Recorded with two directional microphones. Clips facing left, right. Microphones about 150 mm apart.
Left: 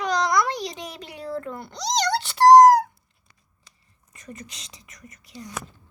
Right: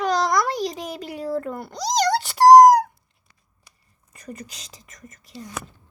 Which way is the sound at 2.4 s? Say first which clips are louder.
Right 2 dB; 10° right (ahead or behind).